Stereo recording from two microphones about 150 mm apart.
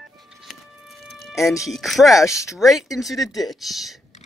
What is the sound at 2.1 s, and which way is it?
Speech, 20° left (ahead or behind).